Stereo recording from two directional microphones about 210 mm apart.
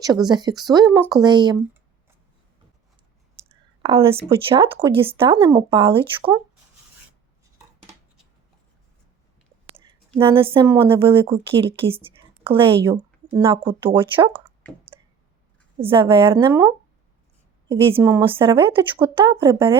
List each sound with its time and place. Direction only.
0.3 s a woman's voice: 20° right (ahead or behind)
3.8 s a woman's voice: 25° right (ahead or behind)
10.2 s a woman's voice: 25° right (ahead or behind)
14.9 s clicking: 20° right (ahead or behind)
15.8 s a woman's voice: 25° right (ahead or behind)